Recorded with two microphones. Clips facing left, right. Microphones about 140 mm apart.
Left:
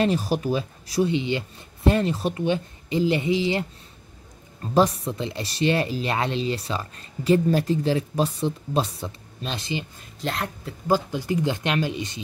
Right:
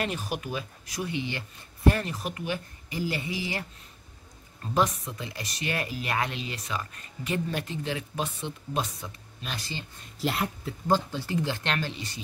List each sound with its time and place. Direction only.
0.0 s speech: 35° left (ahead or behind)
4.7 s speech: 30° left (ahead or behind)
10.2 s a woman's voice: 5° right (ahead or behind)
10.9 s speech: 15° left (ahead or behind)